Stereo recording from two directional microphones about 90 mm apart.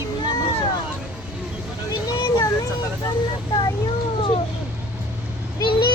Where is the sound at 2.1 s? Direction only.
40° left (ahead or behind).